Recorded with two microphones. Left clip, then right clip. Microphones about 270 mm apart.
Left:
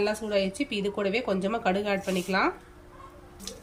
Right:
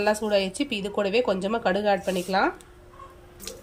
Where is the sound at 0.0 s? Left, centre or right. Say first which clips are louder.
Right 4 dB; centre.